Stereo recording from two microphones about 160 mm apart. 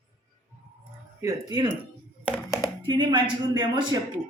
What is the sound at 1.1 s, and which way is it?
Speech, 20° right (ahead or behind).